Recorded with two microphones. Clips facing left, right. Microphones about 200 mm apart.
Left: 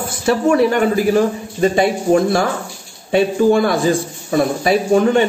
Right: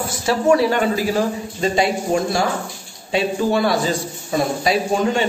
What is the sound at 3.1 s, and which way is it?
A man's voice, 50° left (ahead or behind).